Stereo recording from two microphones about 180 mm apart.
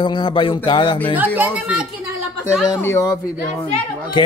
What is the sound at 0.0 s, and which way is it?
Speech, 30° left (ahead or behind).